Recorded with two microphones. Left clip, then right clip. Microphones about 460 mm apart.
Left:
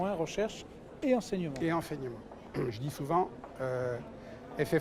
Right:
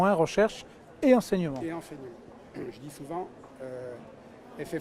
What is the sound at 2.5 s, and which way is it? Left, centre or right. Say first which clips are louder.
Speech: left 4 dB; left.